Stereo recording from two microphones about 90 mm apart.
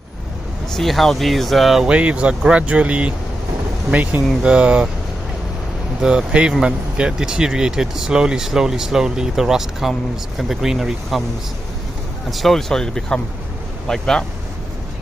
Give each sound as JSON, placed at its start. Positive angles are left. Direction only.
{"t": 0.7, "sound": "speech", "side_deg": 0}
{"t": 5.9, "sound": "speech", "side_deg": -10}
{"t": 12.3, "sound": "speech", "side_deg": 0}